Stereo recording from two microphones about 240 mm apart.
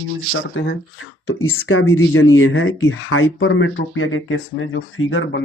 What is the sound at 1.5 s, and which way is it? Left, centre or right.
Speech, left.